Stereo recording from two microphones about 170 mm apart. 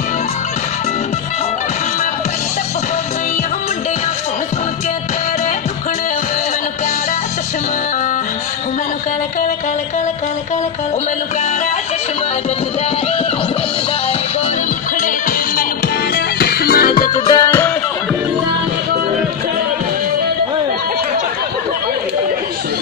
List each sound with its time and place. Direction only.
15.0 s music: 50° left (ahead or behind)
16.2 s music: 65° left (ahead or behind)
17.3 s music: 20° left (ahead or behind)